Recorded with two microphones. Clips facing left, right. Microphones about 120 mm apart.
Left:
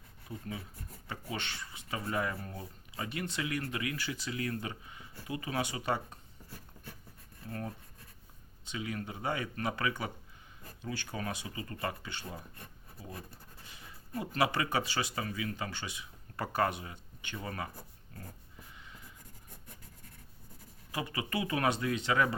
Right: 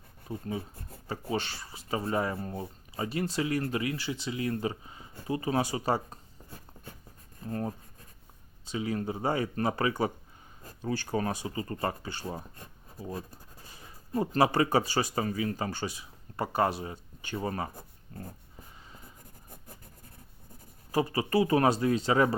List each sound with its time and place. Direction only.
0.3 s speech: 30° right (ahead or behind)
20.9 s speech: 35° right (ahead or behind)